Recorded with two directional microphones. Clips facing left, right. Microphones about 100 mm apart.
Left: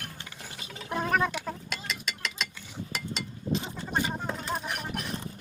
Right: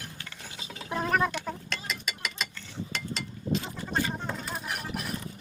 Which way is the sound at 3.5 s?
15° left (ahead or behind).